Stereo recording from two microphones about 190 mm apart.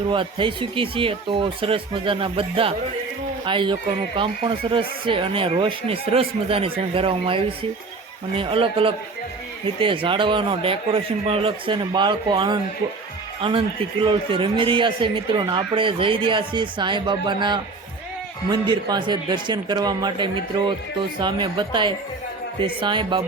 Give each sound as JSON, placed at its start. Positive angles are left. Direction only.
{"t": 0.1, "sound": "a man's voice", "side_deg": -25}